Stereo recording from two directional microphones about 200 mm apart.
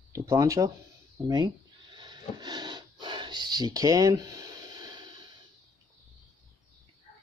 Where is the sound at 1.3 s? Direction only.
20° right (ahead or behind).